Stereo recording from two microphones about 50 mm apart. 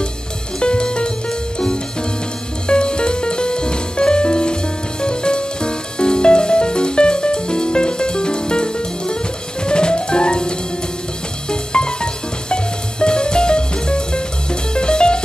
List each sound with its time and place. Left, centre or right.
0.6 s music: centre
2.7 s music: centre
11.5 s music: centre